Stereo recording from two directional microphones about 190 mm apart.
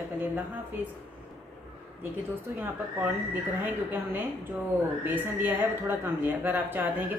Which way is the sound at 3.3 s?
10° right (ahead or behind).